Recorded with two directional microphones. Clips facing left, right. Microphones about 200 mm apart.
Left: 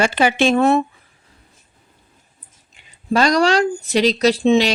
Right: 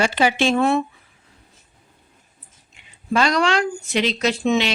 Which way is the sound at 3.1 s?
40° left (ahead or behind).